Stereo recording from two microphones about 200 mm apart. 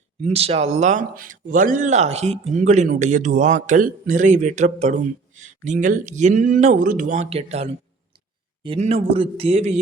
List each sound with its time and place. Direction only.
0.2 s a man's voice: 30° right (ahead or behind)